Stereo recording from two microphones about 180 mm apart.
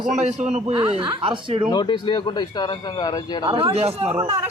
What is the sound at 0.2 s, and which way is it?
Speech, 40° right (ahead or behind).